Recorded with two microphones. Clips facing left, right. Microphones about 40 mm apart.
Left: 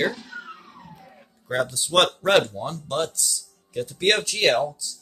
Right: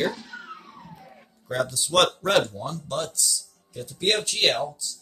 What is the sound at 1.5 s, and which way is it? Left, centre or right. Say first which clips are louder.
Speech: left 1 dB; centre.